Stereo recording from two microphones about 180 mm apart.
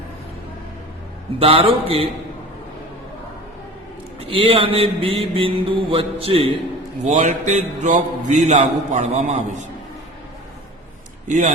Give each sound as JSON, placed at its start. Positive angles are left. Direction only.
{"t": 1.4, "sound": "a man's voice", "side_deg": -30}
{"t": 4.2, "sound": "a man's voice", "side_deg": -30}
{"t": 11.3, "sound": "speech", "side_deg": -45}